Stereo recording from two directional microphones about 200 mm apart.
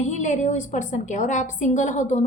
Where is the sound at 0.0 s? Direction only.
35° left (ahead or behind).